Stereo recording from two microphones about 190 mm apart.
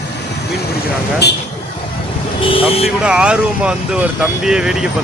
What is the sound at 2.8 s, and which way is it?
Speech, 5° right (ahead or behind).